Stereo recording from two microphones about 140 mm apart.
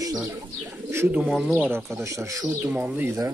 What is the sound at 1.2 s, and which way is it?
Speech, centre (ahead or behind).